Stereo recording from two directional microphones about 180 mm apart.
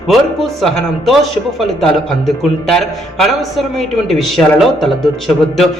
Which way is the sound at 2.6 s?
Centre (ahead or behind).